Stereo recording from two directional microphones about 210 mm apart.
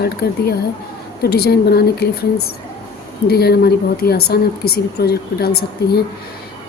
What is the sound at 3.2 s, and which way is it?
Speech, 50° left (ahead or behind).